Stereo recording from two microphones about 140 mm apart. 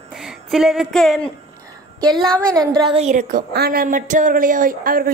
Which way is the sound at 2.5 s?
30° right (ahead or behind).